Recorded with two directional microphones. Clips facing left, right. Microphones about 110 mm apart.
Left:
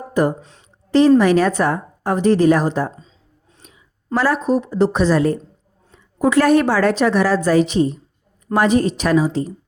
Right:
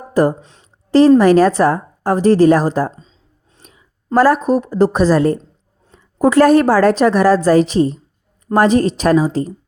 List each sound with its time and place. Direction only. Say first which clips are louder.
0.1 s a woman's voice: right 4 dB; 35° right (ahead or behind)